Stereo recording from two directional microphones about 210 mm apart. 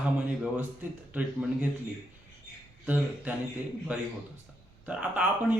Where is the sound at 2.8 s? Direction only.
10° right (ahead or behind).